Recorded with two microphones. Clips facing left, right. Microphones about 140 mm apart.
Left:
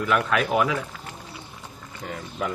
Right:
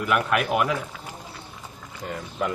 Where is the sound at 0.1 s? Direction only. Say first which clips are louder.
Even; 10° right (ahead or behind).